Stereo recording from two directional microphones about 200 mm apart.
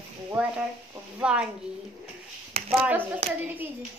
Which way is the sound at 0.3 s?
5° right (ahead or behind).